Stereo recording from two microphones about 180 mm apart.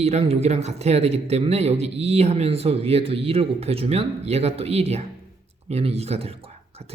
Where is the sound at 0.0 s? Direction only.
35° right (ahead or behind).